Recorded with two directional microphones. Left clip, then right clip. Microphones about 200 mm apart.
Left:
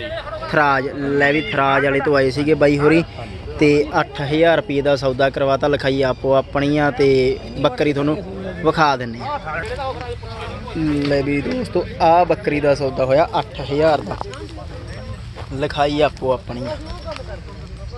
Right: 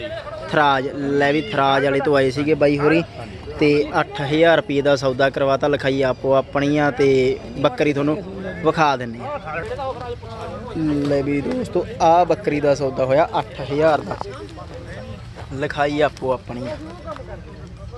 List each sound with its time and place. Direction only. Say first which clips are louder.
0.5 s speech: left 1 dB; centre (ahead or behind)
11.1 s speech: left 2 dB; centre (ahead or behind)
11.3 s speech: left 1 dB; 50° right (ahead or behind)
11.7 s speech: left 1 dB; 5° right (ahead or behind)
15.5 s speech: left 2 dB; centre (ahead or behind)